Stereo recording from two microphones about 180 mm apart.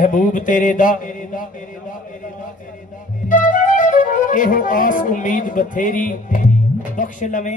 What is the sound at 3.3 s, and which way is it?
A man's voice, 45° left (ahead or behind).